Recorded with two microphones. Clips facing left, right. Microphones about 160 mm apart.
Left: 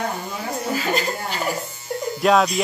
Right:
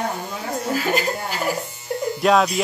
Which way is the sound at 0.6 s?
5° right (ahead or behind).